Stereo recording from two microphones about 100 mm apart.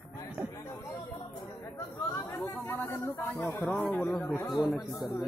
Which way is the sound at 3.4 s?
20° left (ahead or behind).